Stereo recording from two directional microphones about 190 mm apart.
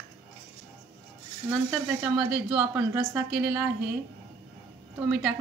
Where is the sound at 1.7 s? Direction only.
5° right (ahead or behind).